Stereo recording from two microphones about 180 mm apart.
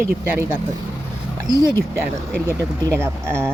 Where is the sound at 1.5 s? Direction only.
15° left (ahead or behind).